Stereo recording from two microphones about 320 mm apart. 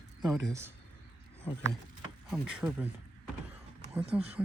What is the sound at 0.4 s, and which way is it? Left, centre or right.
Speech, centre.